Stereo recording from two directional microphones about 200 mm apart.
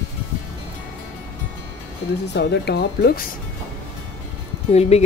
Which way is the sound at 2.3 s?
55° left (ahead or behind).